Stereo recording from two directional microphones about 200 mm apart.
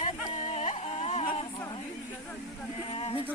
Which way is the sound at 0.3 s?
35° left (ahead or behind).